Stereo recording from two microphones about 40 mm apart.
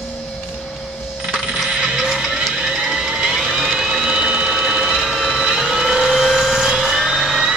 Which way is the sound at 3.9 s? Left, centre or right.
Right.